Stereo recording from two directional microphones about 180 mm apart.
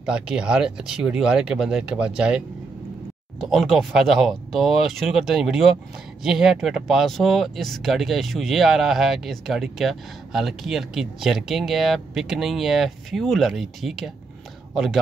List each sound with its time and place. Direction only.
0.0 s a man's voice: 5° right (ahead or behind)